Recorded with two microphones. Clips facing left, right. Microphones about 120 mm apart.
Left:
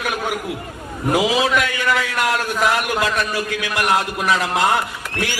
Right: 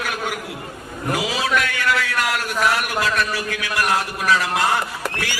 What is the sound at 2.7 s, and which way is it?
A man's voice, 20° left (ahead or behind).